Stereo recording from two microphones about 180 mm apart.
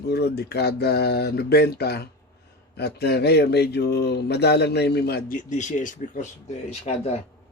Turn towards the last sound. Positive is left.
turn(degrees=40)  # may be behind; listen again after turning